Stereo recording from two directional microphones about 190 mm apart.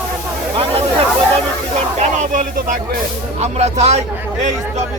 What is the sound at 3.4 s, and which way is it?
Speech, 35° right (ahead or behind).